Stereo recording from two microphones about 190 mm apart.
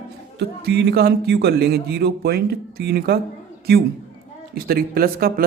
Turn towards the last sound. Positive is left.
turn(degrees=-55)  # may be behind; listen again after turning